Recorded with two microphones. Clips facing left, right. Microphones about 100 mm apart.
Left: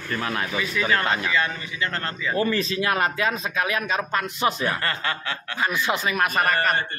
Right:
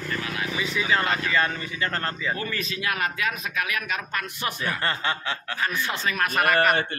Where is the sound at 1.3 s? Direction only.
40° right (ahead or behind).